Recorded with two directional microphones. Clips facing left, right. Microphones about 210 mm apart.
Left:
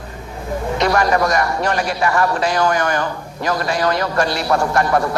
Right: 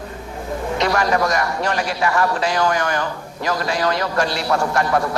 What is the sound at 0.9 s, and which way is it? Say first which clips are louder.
A man's voice: left 3 dB; 55° left (ahead or behind).